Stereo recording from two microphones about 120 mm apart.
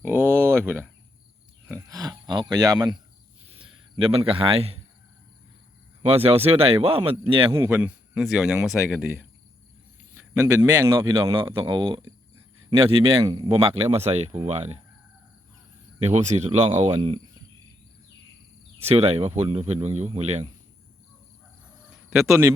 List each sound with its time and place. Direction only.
0.0 s a sound: 20° right (ahead or behind)
1.7 s speech: 30° right (ahead or behind)
3.4 s a sound: 50° right (ahead or behind)
6.1 s speech: 55° right (ahead or behind)
7.5 s speech: 20° right (ahead or behind)
9.0 s a man's voice: 15° right (ahead or behind)
11.3 s speech: 40° right (ahead or behind)
13.2 s speech: 40° right (ahead or behind); by 14.8 s 65° right (ahead or behind)
16.0 s speech: 65° right (ahead or behind)
18.8 s speech: 60° right (ahead or behind)
21.8 s a sound: centre (ahead or behind)